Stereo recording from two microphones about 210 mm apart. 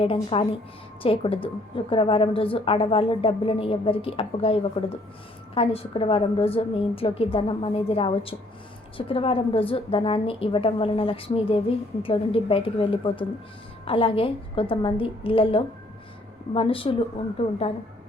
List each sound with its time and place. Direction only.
0.0 s a woman's voice: 25° left (ahead or behind)